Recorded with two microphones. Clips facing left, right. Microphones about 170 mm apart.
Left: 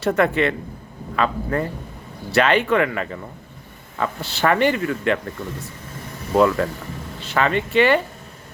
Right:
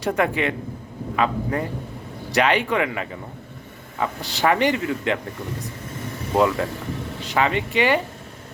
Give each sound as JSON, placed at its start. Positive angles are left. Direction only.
{"t": 0.0, "sound": "speech", "side_deg": -15}